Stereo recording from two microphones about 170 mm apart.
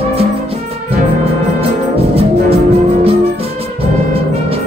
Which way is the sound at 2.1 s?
35° right (ahead or behind).